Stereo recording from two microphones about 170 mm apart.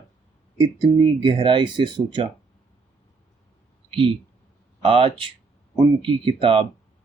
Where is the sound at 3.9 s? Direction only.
30° right (ahead or behind).